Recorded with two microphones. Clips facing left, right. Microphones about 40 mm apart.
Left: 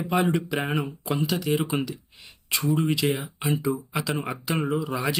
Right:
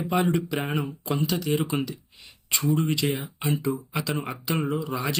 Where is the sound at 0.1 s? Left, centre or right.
Centre.